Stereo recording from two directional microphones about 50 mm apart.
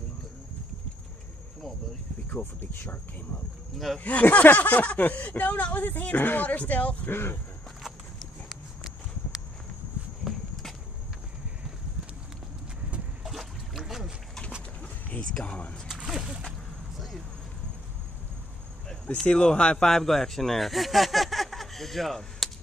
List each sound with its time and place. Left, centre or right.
2.2 s speech: left
3.7 s speech: centre
4.0 s speech: left
7.1 s speech: left
8.5 s walk: centre
10.2 s walk: centre
13.2 s splash: centre
14.8 s a sound: left
15.3 s a sound: centre
16.1 s a sound: centre
16.4 s whip: centre
19.2 s speech: centre
19.9 s speech: centre